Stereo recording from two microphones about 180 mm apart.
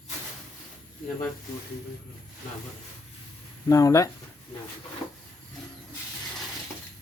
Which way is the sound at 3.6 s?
20° left (ahead or behind).